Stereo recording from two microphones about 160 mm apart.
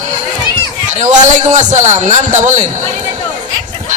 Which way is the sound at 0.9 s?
50° right (ahead or behind).